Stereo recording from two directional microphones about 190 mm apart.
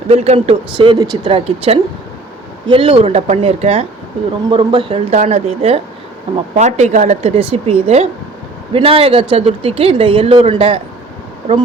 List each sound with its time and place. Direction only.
0.1 s speech: 35° right (ahead or behind)